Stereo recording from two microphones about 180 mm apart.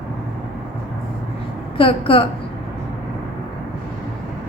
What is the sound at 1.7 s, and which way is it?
Speech, 30° left (ahead or behind).